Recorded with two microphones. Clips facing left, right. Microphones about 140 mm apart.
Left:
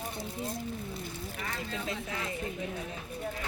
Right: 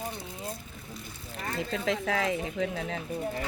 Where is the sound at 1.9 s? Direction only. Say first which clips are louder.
Right 8 dB; 90° right.